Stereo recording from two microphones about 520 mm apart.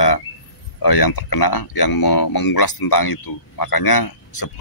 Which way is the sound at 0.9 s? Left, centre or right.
Left.